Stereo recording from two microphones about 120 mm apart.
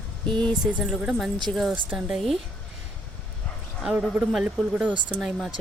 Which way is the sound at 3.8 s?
10° right (ahead or behind).